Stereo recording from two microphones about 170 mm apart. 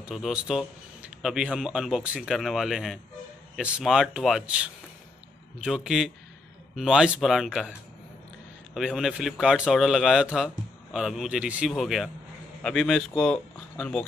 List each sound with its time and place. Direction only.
0.0 s speech: centre (ahead or behind)
8.7 s speech: 5° right (ahead or behind)